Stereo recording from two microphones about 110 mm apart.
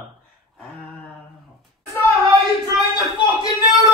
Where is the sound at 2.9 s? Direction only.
40° left (ahead or behind).